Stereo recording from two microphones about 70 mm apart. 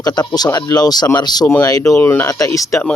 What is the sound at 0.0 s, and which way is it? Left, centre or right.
Speech, left.